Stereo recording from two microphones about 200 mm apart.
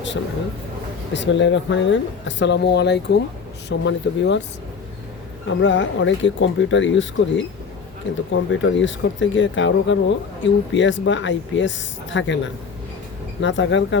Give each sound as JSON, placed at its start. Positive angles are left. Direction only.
{"t": 1.1, "sound": "speech", "side_deg": 65}
{"t": 5.5, "sound": "speech", "side_deg": 65}
{"t": 13.4, "sound": "speech", "side_deg": 65}